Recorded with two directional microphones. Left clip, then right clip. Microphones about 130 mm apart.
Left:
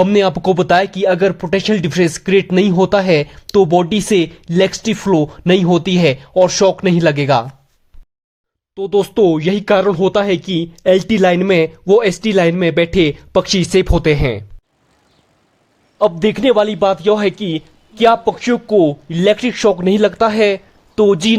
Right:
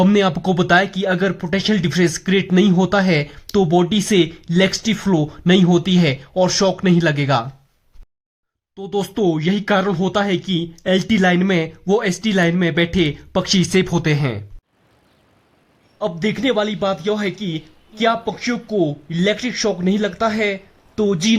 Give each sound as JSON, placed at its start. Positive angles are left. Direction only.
{"t": 0.0, "sound": "speech", "side_deg": 35}
{"t": 8.7, "sound": "speech", "side_deg": 35}
{"t": 16.0, "sound": "speech", "side_deg": 45}